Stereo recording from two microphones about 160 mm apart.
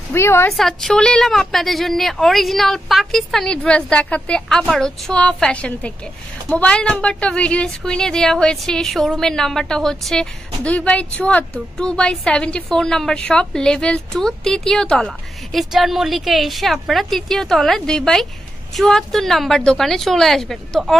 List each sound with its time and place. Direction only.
0.1 s a woman's voice: 15° left (ahead or behind)
0.5 s a woman's voice: centre (ahead or behind)